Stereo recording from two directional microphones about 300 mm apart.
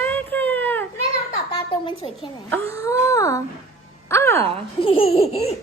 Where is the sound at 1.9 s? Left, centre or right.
Centre.